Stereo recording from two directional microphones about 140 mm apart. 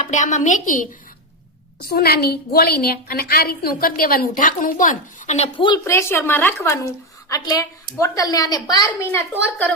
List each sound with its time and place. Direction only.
0.1 s a woman's voice: 60° left (ahead or behind)
1.9 s a woman's voice: 90° left; by 5.5 s 55° left (ahead or behind)
5.5 s a woman's voice: 35° left (ahead or behind)
5.8 s a woman's voice: 20° left (ahead or behind)
7.3 s a woman's voice: 25° left (ahead or behind); by 9.7 s 10° left (ahead or behind)